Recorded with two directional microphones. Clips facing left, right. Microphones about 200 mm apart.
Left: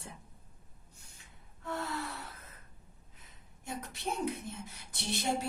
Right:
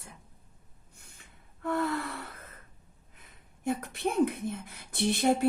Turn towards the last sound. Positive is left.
turn(degrees=-55)  # may be behind; listen again after turning